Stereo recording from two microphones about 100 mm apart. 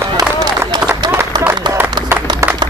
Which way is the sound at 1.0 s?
45° right (ahead or behind).